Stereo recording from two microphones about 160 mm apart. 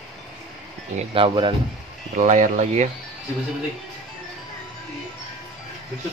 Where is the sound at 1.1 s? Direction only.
30° right (ahead or behind).